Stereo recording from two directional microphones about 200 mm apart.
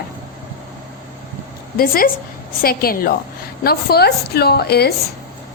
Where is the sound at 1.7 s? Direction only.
45° left (ahead or behind).